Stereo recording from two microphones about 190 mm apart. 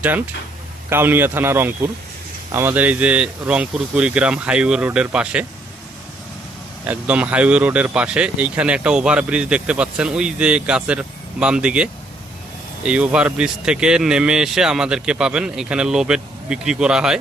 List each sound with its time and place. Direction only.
0.0 s speech: 10° right (ahead or behind)
6.8 s speech: 5° right (ahead or behind)